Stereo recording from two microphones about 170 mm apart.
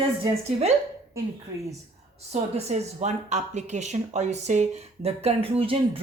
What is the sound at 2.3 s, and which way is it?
Speech, 40° right (ahead or behind).